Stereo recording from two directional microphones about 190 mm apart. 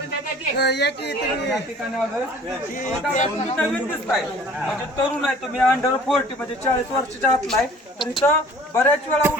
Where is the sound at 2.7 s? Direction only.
40° left (ahead or behind).